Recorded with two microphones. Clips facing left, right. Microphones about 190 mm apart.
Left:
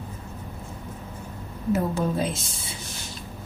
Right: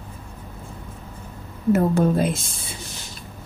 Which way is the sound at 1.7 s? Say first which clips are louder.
Right 5 dB; 55° right (ahead or behind).